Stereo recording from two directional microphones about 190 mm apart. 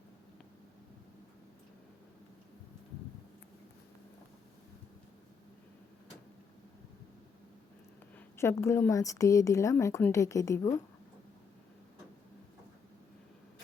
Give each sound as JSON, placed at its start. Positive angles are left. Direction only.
{"t": 8.4, "sound": "a woman's voice", "side_deg": 15}